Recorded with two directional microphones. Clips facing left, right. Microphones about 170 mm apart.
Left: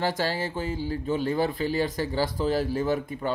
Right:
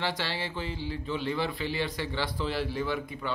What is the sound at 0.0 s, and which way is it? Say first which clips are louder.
Speech: left 6 dB; 45° left (ahead or behind).